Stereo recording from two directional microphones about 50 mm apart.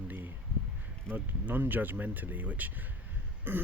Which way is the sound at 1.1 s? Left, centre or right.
Right.